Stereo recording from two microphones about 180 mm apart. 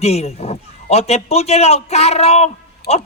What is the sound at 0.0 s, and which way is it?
A man's voice, 35° left (ahead or behind).